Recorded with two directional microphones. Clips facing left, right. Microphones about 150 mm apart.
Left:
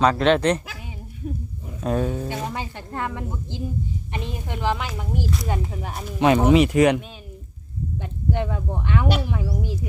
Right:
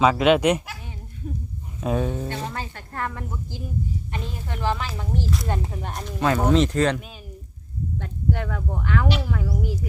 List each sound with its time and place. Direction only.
0.0 s speech: 5° right (ahead or behind)
1.8 s speech: centre (ahead or behind)
6.1 s speech: 15° left (ahead or behind)
8.0 s speech: 20° left (ahead or behind)